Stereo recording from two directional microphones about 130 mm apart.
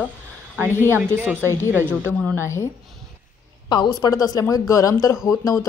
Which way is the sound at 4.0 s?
30° left (ahead or behind).